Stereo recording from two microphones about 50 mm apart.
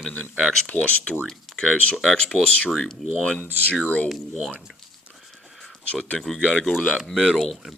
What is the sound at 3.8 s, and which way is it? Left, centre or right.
Speech, left.